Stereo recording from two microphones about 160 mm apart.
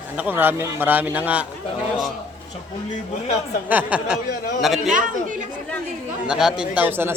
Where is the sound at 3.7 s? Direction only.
10° right (ahead or behind).